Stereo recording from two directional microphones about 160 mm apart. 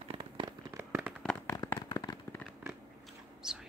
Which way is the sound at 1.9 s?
25° left (ahead or behind).